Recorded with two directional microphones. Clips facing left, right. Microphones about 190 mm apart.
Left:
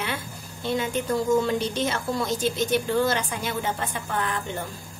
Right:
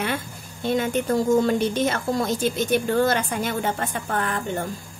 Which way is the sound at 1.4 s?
50° right (ahead or behind).